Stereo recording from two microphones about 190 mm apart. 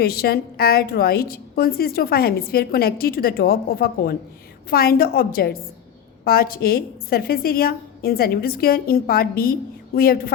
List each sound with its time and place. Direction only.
0.0 s a woman's voice: 55° left (ahead or behind)